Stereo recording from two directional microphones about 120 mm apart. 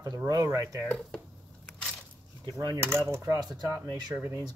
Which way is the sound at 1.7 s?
10° left (ahead or behind).